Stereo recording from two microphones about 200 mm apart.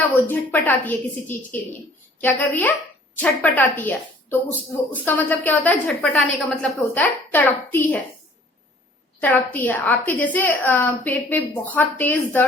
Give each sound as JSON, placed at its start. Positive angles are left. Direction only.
{"t": 0.3, "sound": "a woman's voice", "side_deg": 10}
{"t": 9.2, "sound": "a woman's voice", "side_deg": 10}